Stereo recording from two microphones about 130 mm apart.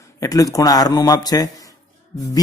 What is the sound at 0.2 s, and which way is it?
Speech, 25° left (ahead or behind).